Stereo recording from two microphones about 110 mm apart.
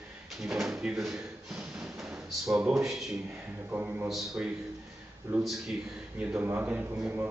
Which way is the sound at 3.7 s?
15° right (ahead or behind).